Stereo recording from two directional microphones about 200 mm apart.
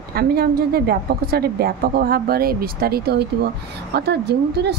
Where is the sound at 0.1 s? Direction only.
50° right (ahead or behind).